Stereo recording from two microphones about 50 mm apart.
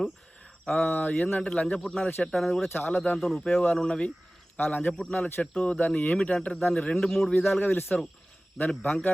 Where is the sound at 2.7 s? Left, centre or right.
Left.